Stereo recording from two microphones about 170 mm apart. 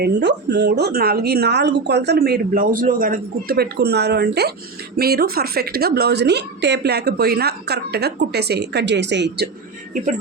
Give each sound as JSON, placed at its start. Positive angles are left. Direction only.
{"t": 0.0, "sound": "speech", "side_deg": -85}